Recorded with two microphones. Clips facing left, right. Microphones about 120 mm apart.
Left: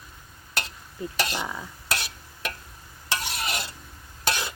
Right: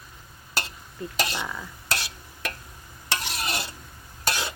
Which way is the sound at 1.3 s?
15° left (ahead or behind).